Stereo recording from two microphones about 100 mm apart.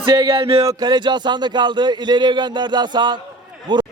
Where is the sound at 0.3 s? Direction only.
65° right (ahead or behind).